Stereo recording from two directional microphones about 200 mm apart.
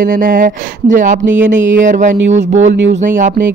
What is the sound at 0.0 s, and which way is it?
Speech, 45° right (ahead or behind).